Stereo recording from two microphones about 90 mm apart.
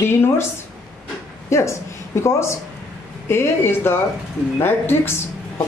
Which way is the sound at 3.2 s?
25° left (ahead or behind).